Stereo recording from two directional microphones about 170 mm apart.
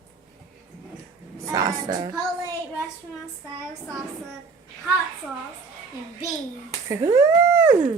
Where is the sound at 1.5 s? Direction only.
25° right (ahead or behind).